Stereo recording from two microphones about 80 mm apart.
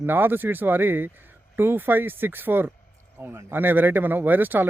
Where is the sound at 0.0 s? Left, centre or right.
Right.